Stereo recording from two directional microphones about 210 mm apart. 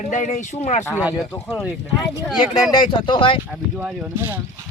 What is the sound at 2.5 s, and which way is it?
Speech, 20° left (ahead or behind).